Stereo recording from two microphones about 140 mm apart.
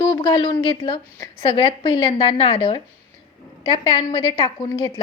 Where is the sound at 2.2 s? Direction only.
45° left (ahead or behind).